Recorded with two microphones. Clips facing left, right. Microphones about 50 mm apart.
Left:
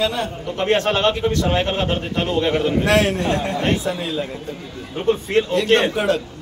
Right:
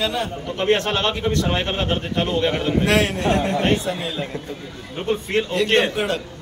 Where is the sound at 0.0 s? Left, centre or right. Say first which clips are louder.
Left 2 dB; centre.